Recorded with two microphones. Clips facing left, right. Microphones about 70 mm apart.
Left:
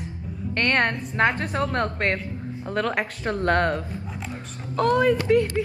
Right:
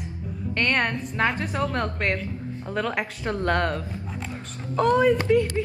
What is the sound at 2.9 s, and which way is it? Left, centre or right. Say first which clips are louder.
Speech: left 1 dB; left.